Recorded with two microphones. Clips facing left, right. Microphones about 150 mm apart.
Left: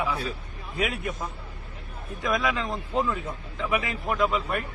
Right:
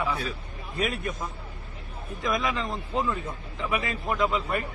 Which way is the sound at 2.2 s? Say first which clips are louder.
Left 1 dB; centre (ahead or behind).